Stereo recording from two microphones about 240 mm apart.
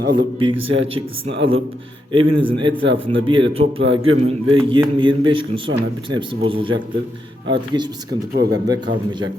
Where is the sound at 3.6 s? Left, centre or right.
Right.